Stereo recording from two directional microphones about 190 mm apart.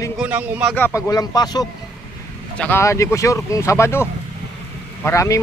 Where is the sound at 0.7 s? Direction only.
15° left (ahead or behind).